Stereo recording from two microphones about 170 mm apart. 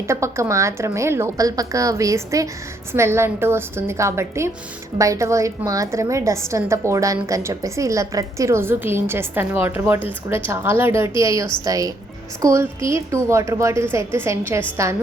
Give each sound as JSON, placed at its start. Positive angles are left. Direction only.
{"t": 0.1, "sound": "a woman's voice", "side_deg": -15}